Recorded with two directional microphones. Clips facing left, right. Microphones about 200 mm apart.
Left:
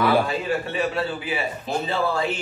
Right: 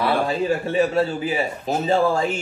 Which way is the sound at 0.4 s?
40° right (ahead or behind).